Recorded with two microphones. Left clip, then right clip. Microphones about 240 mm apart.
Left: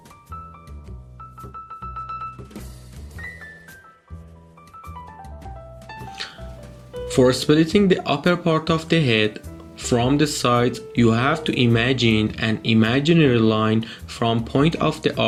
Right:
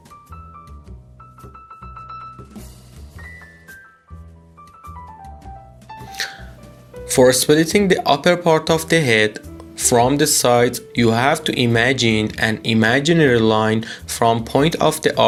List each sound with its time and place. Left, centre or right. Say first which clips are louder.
6.1 s music: right 9 dB; right
7.1 s speech: right 4 dB; right